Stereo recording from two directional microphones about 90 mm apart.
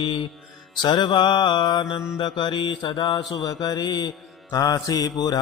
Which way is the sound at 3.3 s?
50° left (ahead or behind).